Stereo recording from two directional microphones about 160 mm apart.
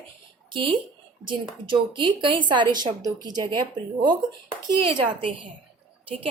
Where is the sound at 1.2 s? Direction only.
30° right (ahead or behind).